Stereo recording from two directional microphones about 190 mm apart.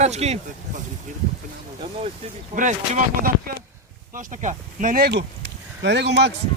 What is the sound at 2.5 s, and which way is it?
Speech, 40° right (ahead or behind).